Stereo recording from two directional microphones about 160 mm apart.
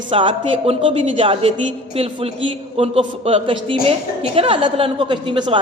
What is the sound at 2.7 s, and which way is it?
A man's voice, 40° right (ahead or behind).